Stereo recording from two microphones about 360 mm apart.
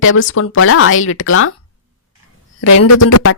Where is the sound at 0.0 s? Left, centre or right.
Left.